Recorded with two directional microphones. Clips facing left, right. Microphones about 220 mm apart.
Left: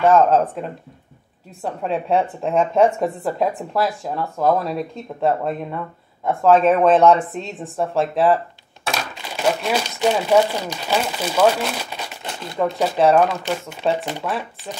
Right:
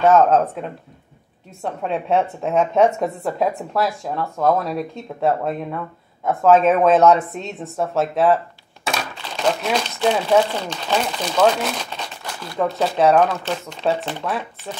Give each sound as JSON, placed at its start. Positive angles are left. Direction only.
{"t": 0.1, "sound": "speech", "side_deg": 0}
{"t": 12.2, "sound": "crumpling", "side_deg": 20}
{"t": 12.7, "sound": "speech", "side_deg": 5}